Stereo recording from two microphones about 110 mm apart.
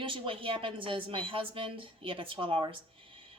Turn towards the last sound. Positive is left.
turn(degrees=-50)  # may be behind; listen again after turning